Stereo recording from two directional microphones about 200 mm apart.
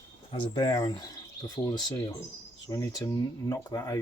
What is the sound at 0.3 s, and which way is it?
Speech, 25° left (ahead or behind).